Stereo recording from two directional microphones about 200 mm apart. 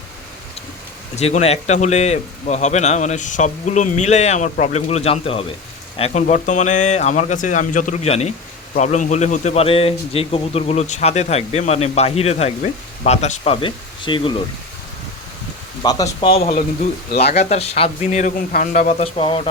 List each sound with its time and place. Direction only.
1.1 s a man's voice: 35° left (ahead or behind)
15.8 s speech: 20° left (ahead or behind)
16.4 s a man's voice: 30° left (ahead or behind)